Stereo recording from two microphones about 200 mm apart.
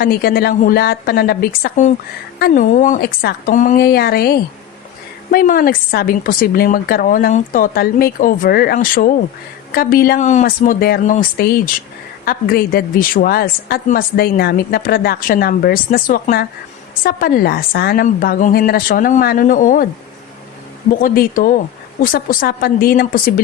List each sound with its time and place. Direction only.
0.0 s a woman's voice: 50° left (ahead or behind)
21.0 s a woman's voice: 45° left (ahead or behind)